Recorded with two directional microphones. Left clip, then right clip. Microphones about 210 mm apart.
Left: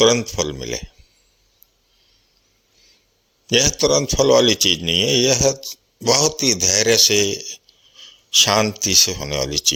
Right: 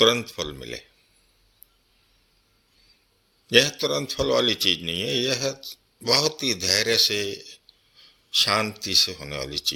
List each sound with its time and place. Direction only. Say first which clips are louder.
0.0 s a man's voice: left 5 dB; 35° left (ahead or behind)
3.4 s a man's voice: left 3 dB; 35° left (ahead or behind)